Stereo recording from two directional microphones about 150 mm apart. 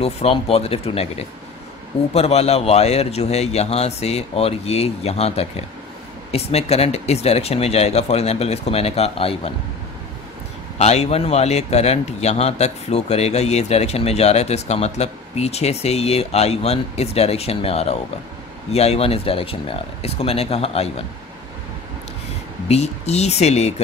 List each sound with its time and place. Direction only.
0.0 s a man's voice: 40° left (ahead or behind)
10.8 s a man's voice: 45° left (ahead or behind)
22.7 s a man's voice: 45° left (ahead or behind)